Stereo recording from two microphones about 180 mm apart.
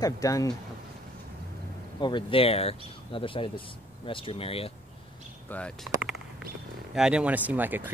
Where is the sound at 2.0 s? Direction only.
25° left (ahead or behind).